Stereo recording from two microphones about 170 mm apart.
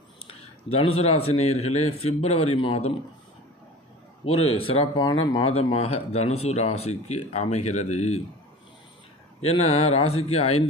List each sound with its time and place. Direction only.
0.3 s speech: 35° left (ahead or behind)
4.2 s speech: 35° left (ahead or behind)
9.4 s speech: 40° left (ahead or behind)